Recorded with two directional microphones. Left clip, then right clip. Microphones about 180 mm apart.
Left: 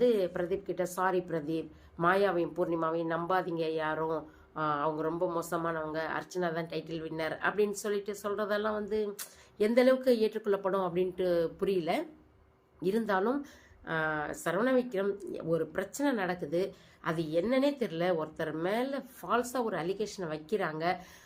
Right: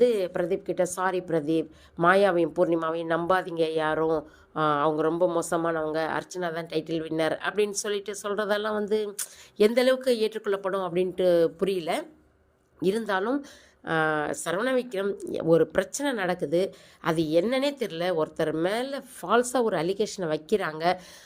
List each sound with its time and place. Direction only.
0.0 s speech: 45° right (ahead or behind)